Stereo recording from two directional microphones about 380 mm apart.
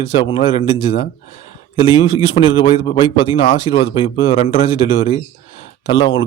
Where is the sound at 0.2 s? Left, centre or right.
Centre.